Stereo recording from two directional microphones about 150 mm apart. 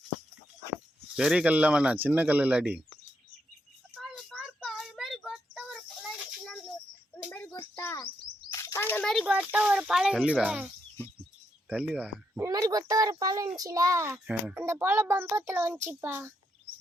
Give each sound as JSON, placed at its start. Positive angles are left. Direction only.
{"t": 1.1, "sound": "a child's voice", "side_deg": -5}
{"t": 3.9, "sound": "child singing", "side_deg": 5}
{"t": 7.3, "sound": "a sound", "side_deg": 10}
{"t": 7.5, "sound": "bird", "side_deg": 20}
{"t": 8.5, "sound": "a sound", "side_deg": 20}
{"t": 9.2, "sound": "speech", "side_deg": -10}
{"t": 11.7, "sound": "a child's voice", "side_deg": -5}
{"t": 12.4, "sound": "a child's voice", "side_deg": -25}